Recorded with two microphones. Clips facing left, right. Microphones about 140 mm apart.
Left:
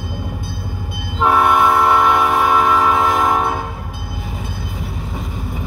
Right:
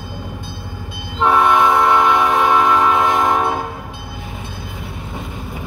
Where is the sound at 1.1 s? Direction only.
5° left (ahead or behind).